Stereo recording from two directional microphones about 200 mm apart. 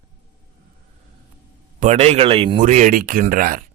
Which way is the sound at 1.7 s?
35° right (ahead or behind).